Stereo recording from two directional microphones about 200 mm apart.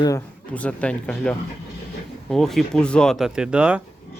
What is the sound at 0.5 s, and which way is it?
Speech, 5° left (ahead or behind).